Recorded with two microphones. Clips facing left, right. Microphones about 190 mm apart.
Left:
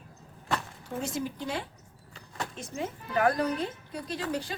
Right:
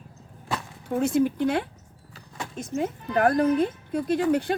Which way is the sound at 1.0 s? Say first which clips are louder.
Right 12 dB; 55° right (ahead or behind).